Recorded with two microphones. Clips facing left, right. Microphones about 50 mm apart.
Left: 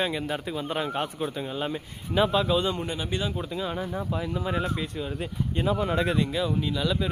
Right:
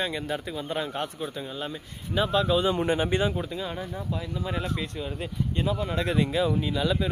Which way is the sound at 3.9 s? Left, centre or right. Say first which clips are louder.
Left 3 dB; centre.